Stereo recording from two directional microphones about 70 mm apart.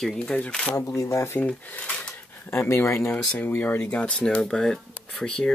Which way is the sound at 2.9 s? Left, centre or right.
Left.